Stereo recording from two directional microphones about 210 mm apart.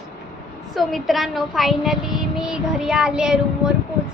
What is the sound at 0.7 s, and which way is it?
A woman's voice, centre (ahead or behind).